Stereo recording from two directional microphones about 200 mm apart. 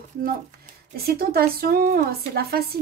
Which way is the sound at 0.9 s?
50° right (ahead or behind).